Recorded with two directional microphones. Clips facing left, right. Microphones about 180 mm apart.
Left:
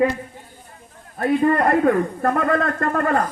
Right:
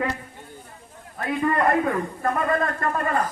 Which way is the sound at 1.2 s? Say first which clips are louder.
Left 6 dB; 50° left (ahead or behind).